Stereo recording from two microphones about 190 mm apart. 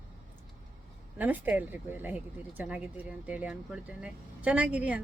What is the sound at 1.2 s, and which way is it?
Speech, 10° right (ahead or behind).